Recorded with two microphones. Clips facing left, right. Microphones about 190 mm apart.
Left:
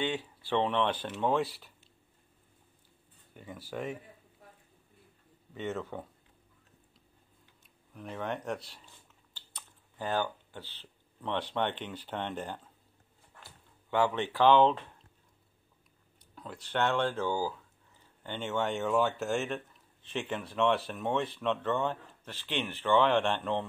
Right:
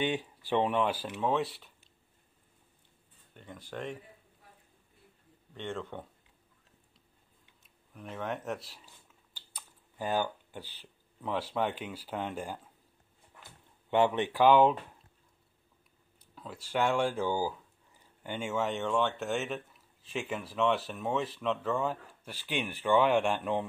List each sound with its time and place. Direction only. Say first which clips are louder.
0.0 s speech: right 2 dB; 15° right (ahead or behind); by 1.7 s centre (ahead or behind)
3.3 s speech: left 2 dB; 5° left (ahead or behind)
5.5 s speech: left 2 dB; 5° left (ahead or behind)
7.9 s speech: left 1 dB; centre (ahead or behind)
13.4 s speech: even; 20° right (ahead or behind)
16.3 s speech: right 1 dB; 5° right (ahead or behind)